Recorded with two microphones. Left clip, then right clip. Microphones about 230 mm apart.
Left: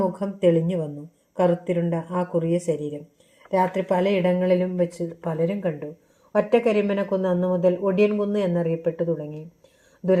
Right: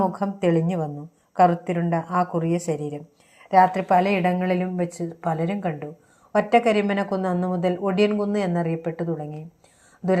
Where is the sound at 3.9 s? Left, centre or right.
Right.